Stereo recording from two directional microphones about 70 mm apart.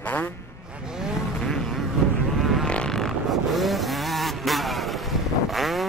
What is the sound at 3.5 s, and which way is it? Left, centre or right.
Vehicle, centre.